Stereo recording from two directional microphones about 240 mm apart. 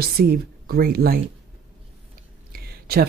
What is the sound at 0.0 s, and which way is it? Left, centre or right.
Speech, right.